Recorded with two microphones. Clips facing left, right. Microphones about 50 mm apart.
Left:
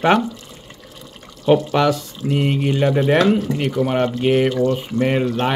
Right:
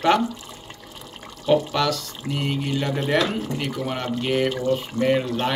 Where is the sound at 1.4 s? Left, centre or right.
Left.